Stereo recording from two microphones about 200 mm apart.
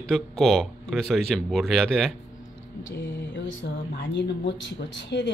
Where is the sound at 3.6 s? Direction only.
60° left (ahead or behind).